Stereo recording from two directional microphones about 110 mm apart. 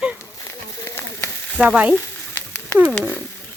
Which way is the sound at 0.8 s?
20° left (ahead or behind).